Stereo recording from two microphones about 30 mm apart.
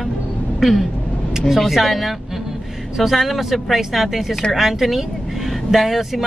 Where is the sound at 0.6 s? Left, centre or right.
Centre.